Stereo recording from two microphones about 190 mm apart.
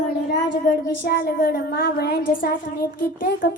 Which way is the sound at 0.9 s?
55° left (ahead or behind).